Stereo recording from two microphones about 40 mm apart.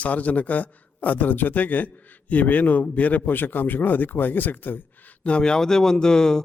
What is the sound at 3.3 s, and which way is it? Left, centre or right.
A man's voice, left.